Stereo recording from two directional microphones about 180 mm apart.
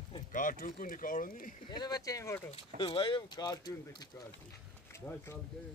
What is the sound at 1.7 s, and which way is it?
Speech, 20° left (ahead or behind).